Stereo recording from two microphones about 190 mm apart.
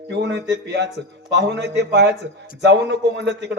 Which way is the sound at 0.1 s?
65° right (ahead or behind).